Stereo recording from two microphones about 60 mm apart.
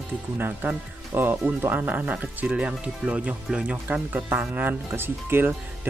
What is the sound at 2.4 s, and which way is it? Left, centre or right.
Speech, right.